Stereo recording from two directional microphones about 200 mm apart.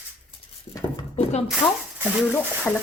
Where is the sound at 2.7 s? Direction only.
5° left (ahead or behind).